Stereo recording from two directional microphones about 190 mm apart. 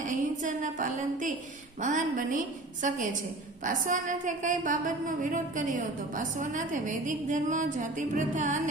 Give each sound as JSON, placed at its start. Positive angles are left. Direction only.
{"t": 0.0, "sound": "a woman's voice", "side_deg": -40}
{"t": 3.6, "sound": "a woman's voice", "side_deg": -45}